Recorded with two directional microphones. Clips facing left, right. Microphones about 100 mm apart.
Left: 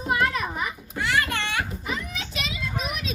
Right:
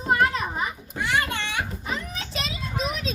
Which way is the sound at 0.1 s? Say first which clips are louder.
Right 2 dB; 30° right (ahead or behind).